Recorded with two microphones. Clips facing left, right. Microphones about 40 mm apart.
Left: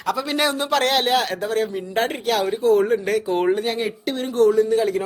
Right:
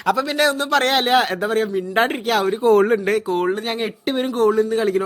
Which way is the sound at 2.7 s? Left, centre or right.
Right.